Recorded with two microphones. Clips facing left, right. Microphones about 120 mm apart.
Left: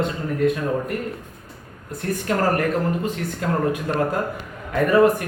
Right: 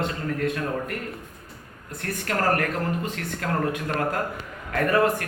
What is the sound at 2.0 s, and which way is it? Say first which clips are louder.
Speech: left 4 dB; 20° left (ahead or behind).